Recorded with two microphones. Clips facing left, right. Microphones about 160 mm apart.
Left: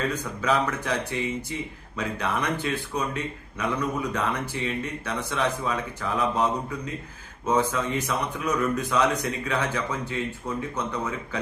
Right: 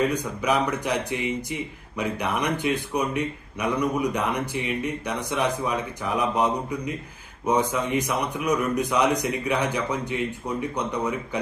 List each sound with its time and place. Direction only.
0.1 s speech: 15° right (ahead or behind)